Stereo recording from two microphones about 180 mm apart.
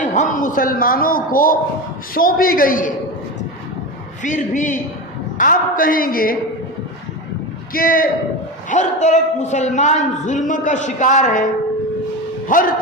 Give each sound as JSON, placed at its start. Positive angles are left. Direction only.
{"t": 0.0, "sound": "a man's voice", "side_deg": 45}
{"t": 4.2, "sound": "a man's voice", "side_deg": 45}
{"t": 7.7, "sound": "a man's voice", "side_deg": 55}
{"t": 8.7, "sound": "a man's voice", "side_deg": 40}
{"t": 12.5, "sound": "a man's voice", "side_deg": 50}